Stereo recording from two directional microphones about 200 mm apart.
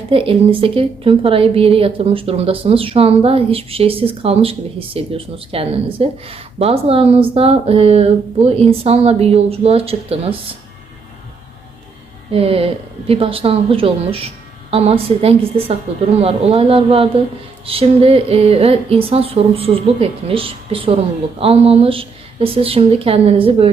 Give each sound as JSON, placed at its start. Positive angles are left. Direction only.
{"t": 0.1, "sound": "speech", "side_deg": -25}
{"t": 12.3, "sound": "speech", "side_deg": -30}